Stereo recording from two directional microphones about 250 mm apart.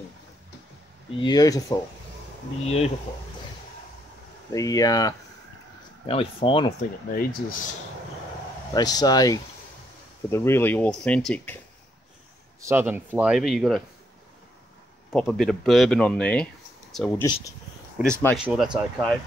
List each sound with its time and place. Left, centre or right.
1.2 s speech: centre
2.6 s speech: left
4.5 s speech: centre
7.2 s speech: left
8.7 s speech: centre
12.6 s speech: centre
15.1 s speech: centre
17.9 s speech: centre